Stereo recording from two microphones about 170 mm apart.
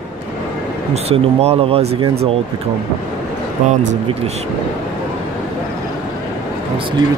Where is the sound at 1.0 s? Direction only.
40° right (ahead or behind).